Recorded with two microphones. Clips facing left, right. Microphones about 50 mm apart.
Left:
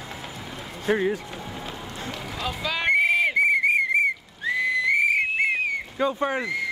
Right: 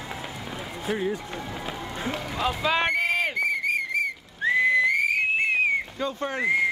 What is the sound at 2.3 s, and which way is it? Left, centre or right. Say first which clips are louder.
Speech: right 4 dB; centre.